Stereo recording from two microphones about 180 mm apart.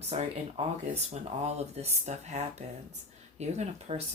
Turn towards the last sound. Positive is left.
turn(degrees=-35)  # may be behind; listen again after turning